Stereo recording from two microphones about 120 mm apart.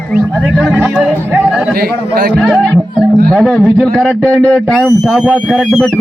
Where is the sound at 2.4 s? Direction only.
5° left (ahead or behind).